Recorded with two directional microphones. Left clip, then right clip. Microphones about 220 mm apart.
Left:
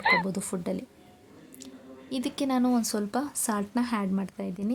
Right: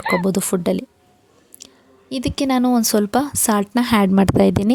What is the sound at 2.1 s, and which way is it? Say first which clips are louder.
Speech: right 9 dB; 30° right (ahead or behind).